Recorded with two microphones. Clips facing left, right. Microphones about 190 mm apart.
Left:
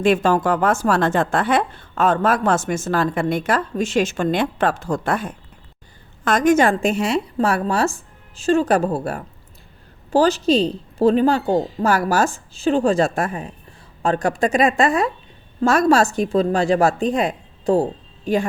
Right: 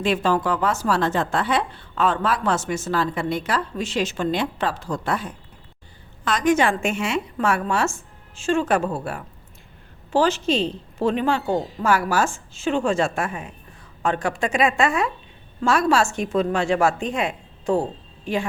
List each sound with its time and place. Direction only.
0.0 s a woman's voice: 50° left (ahead or behind)